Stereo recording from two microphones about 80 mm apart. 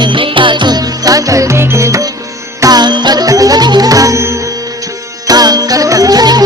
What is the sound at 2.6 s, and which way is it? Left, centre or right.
Music, right.